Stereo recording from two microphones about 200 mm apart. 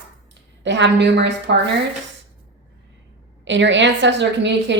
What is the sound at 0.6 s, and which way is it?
A woman's voice, 65° right (ahead or behind).